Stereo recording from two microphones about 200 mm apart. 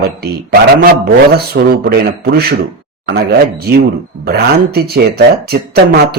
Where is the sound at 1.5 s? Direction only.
60° right (ahead or behind).